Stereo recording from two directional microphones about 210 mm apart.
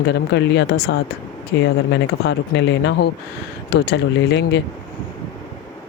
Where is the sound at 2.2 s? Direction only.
55° left (ahead or behind).